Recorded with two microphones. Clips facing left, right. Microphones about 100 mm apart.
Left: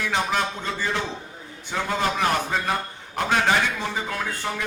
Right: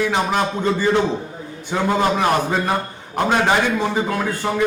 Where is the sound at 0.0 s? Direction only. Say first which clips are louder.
Right 5 dB; 15° right (ahead or behind).